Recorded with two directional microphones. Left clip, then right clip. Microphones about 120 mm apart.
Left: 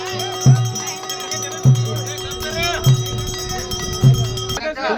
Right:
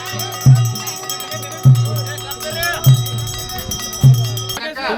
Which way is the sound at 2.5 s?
35° left (ahead or behind).